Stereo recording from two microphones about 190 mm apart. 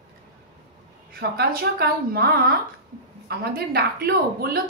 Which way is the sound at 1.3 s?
55° right (ahead or behind).